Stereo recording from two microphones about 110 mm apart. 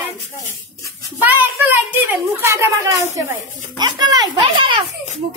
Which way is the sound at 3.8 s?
40° right (ahead or behind).